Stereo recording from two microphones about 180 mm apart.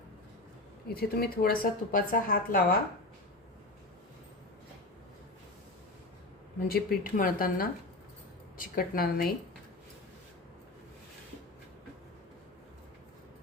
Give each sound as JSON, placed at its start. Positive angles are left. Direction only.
{"t": 0.9, "sound": "speech", "side_deg": 60}
{"t": 6.7, "sound": "speech", "side_deg": 60}